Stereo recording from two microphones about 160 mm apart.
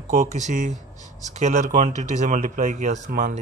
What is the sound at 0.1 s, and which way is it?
Speech, 55° right (ahead or behind).